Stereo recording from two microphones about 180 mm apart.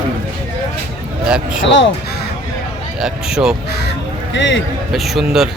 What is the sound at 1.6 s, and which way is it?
Speech, 90° left.